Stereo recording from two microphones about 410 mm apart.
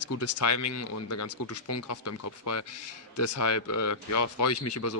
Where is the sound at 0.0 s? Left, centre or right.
Left.